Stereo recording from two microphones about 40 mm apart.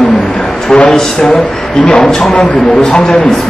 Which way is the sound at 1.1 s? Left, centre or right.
Centre.